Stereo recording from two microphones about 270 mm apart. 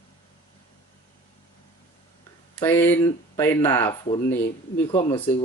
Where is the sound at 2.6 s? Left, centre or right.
Centre.